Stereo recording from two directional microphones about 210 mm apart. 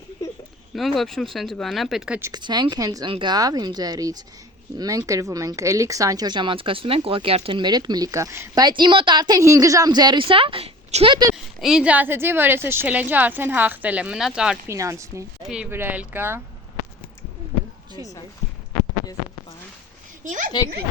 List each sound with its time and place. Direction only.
0.8 s speech: centre (ahead or behind)
2.3 s a woman's voice: 20° right (ahead or behind)
11.6 s a woman's voice: 5° right (ahead or behind)
14.8 s a woman's voice: 15° right (ahead or behind)
20.2 s speech: 35° right (ahead or behind)